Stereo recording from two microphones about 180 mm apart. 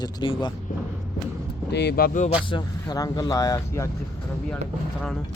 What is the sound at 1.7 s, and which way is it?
Speech, 65° left (ahead or behind).